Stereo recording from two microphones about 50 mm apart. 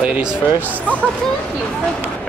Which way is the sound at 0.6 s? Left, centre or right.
Right.